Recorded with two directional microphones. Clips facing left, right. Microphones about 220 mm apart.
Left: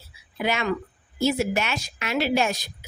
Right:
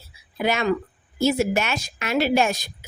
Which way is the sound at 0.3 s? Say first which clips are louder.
Right 3 dB; 40° right (ahead or behind).